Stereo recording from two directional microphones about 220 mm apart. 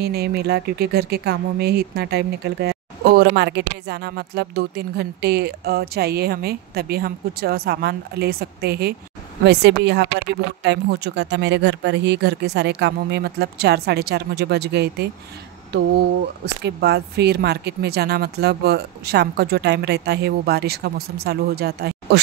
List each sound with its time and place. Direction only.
0.0 s speech: 45° right (ahead or behind)
16.6 s speech: 50° right (ahead or behind)